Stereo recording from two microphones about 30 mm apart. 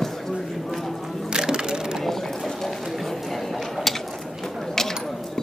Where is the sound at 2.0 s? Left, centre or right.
Centre.